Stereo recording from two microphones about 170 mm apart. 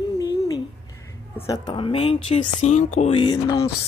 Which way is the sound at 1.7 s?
30° left (ahead or behind).